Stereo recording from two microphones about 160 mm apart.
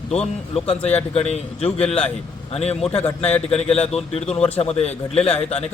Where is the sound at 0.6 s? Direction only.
40° left (ahead or behind).